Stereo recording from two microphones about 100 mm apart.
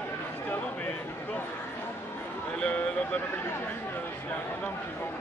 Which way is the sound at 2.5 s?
10° left (ahead or behind).